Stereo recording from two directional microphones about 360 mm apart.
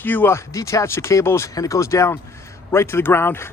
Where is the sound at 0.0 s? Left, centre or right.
Centre.